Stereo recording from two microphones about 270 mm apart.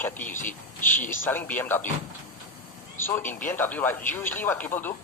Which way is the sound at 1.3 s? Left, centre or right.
Centre.